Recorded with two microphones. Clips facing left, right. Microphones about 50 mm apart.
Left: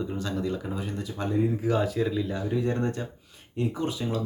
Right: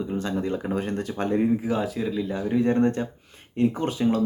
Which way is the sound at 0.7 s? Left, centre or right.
Right.